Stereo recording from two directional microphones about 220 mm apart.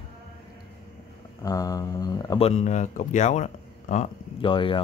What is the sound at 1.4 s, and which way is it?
Speech, 15° left (ahead or behind).